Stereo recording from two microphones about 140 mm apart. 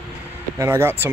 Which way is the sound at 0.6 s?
20° right (ahead or behind).